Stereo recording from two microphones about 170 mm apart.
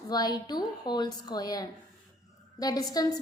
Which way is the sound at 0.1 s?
25° left (ahead or behind).